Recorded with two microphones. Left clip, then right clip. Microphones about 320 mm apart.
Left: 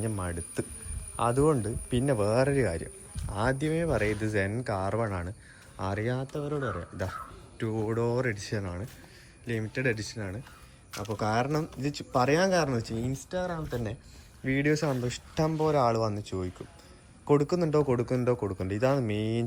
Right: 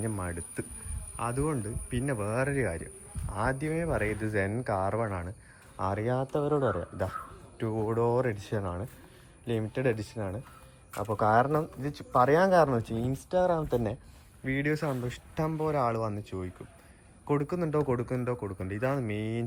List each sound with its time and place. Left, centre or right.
0.0 s speech: centre
11.8 s speech: centre
12.1 s speech: centre